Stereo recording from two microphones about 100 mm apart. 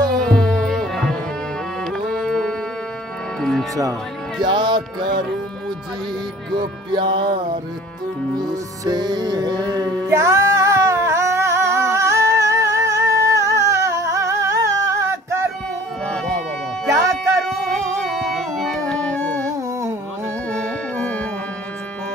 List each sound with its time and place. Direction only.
0.2 s music: 5° left (ahead or behind)
4.4 s music: 50° right (ahead or behind)
6.5 s music: 50° right (ahead or behind)
8.4 s music: 45° right (ahead or behind)
16.8 s music: 35° right (ahead or behind)
17.5 s music: 5° left (ahead or behind)
20.5 s music: 10° left (ahead or behind)